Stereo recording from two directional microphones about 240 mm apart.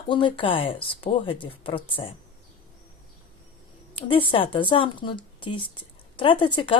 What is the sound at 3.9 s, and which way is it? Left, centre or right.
Speech, left.